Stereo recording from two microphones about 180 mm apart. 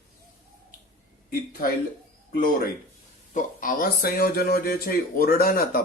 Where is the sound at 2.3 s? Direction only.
55° left (ahead or behind).